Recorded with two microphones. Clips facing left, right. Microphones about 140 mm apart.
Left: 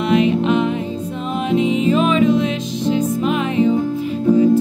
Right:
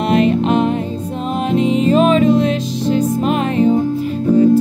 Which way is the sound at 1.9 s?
40° right (ahead or behind).